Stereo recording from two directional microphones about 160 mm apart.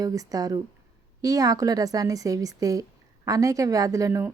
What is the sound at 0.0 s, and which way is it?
A woman's voice, 20° right (ahead or behind).